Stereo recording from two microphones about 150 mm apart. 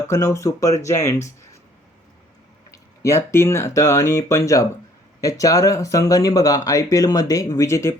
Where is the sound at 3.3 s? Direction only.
20° left (ahead or behind).